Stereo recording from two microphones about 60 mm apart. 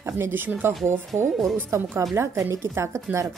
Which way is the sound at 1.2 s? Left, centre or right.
Centre.